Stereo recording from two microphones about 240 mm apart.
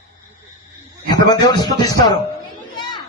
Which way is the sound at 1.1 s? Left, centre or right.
Centre.